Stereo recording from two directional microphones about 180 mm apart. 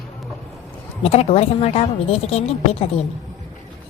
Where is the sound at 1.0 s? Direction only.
35° left (ahead or behind).